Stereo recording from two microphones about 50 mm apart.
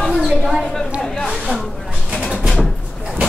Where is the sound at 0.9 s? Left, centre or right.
Centre.